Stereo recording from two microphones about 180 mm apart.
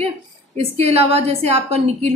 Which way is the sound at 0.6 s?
35° right (ahead or behind).